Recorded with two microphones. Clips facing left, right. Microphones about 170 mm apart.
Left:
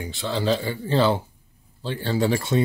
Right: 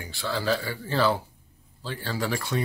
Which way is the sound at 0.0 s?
20° left (ahead or behind).